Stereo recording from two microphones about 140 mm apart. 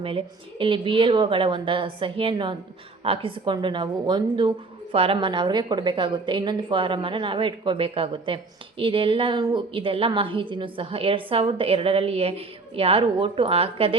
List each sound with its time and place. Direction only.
0.6 s a woman's voice: 35° right (ahead or behind)